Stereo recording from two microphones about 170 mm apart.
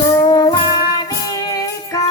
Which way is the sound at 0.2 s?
25° left (ahead or behind).